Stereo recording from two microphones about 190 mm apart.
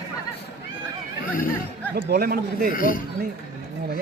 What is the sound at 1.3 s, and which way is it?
Speech, 45° left (ahead or behind).